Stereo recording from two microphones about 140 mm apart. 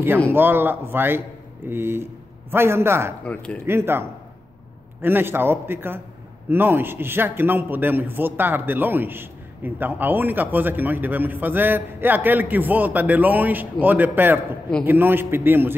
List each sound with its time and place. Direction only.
0.3 s a man's voice: 15° right (ahead or behind)
5.0 s a man's voice: 15° right (ahead or behind)